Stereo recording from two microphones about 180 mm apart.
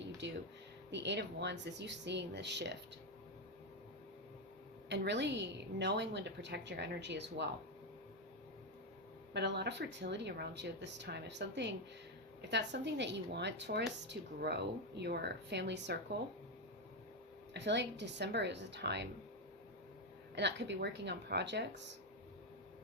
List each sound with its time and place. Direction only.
0.0 s a sound: 80° right
0.9 s a woman's voice: 75° right (ahead or behind)
4.9 s a woman's voice: 75° right (ahead or behind)
9.3 s a woman's voice: 70° right (ahead or behind)
17.5 s a woman's voice: 75° right (ahead or behind)
20.3 s a woman's voice: 75° right (ahead or behind)